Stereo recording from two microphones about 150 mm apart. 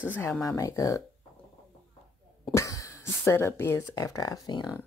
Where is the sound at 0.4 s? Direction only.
20° left (ahead or behind).